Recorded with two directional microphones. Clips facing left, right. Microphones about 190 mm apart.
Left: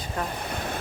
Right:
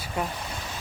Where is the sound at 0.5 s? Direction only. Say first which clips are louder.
Left 6 dB; 60° left (ahead or behind).